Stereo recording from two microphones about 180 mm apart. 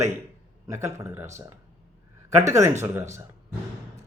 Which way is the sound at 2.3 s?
15° right (ahead or behind).